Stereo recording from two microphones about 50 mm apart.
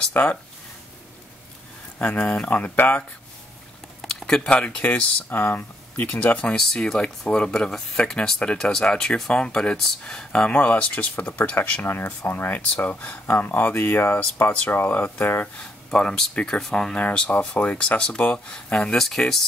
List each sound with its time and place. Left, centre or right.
0.1 s speech: left
2.0 s speech: left
4.0 s a sound: centre
4.5 s speech: left
5.3 s speech: left
6.1 s speech: left
6.5 s speech: centre
10.5 s speech: left
11.8 s speech: left
12.8 s speech: left
13.3 s speech: left
15.9 s speech: centre
18.9 s speech: centre